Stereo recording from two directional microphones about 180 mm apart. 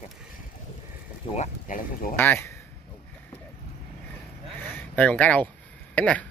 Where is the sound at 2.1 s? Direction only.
10° left (ahead or behind).